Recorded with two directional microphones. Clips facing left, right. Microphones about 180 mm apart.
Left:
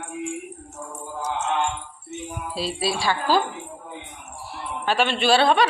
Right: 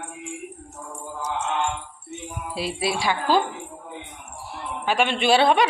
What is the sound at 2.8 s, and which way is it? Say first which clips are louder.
Speech: even; 20° right (ahead or behind).